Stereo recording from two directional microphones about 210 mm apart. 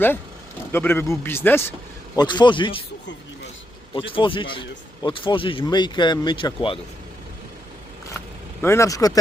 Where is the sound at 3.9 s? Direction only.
25° left (ahead or behind).